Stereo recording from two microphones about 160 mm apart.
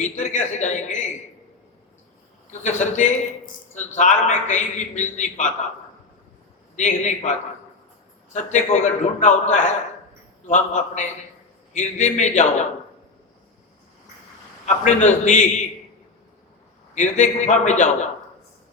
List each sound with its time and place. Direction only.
0.0 s a sound: 45° left (ahead or behind)
2.5 s a man's voice: 45° left (ahead or behind)
6.7 s a man's voice: 45° left (ahead or behind)
14.8 s a man's voice: 50° left (ahead or behind)
16.9 s a man's voice: 50° left (ahead or behind)